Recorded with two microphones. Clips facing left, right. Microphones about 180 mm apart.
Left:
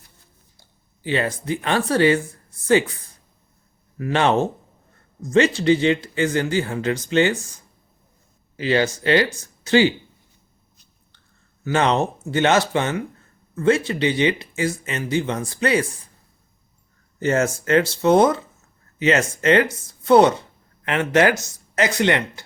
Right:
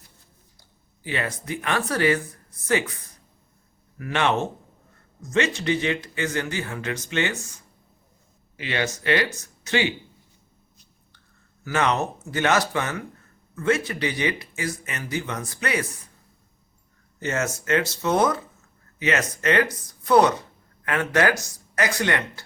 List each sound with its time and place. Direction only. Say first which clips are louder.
1.0 s speech: left 6 dB; 30° left (ahead or behind)
8.5 s speech: left 8 dB; 35° left (ahead or behind)
11.6 s speech: left 4 dB; 30° left (ahead or behind)
17.2 s speech: left 7 dB; 30° left (ahead or behind)